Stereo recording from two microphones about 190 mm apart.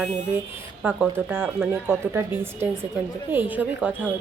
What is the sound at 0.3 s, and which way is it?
Speech, 10° right (ahead or behind).